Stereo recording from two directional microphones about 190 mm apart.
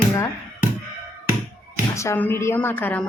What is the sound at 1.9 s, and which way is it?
Speech, 15° left (ahead or behind).